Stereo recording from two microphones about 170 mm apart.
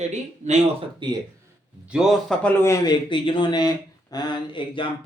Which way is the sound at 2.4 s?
15° left (ahead or behind).